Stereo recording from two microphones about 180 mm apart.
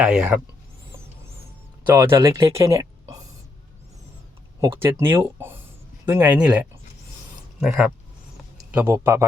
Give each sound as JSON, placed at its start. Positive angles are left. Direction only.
{"t": 0.0, "sound": "speech", "side_deg": -5}
{"t": 1.9, "sound": "speech", "side_deg": -15}
{"t": 2.6, "sound": "a sound", "side_deg": -15}
{"t": 4.6, "sound": "speech", "side_deg": -15}